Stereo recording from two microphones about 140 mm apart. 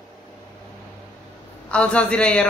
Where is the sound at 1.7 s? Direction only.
10° left (ahead or behind).